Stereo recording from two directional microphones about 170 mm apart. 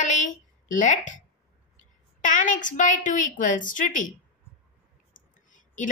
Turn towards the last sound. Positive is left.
turn(degrees=50)  # may be behind; listen again after turning